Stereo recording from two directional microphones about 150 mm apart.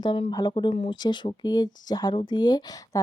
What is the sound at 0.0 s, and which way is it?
Speech, 30° left (ahead or behind).